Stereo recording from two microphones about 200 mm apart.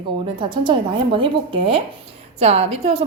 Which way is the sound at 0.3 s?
25° right (ahead or behind).